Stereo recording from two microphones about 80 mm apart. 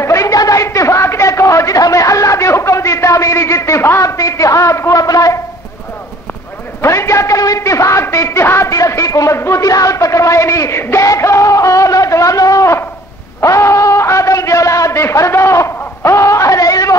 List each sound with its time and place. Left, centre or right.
0.0 s a sound: left
4.2 s a woman's voice: left
6.8 s a man's voice: left